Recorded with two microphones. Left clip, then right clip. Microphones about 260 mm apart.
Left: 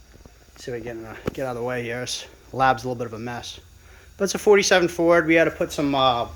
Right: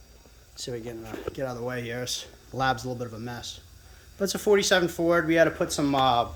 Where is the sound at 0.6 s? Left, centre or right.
Centre.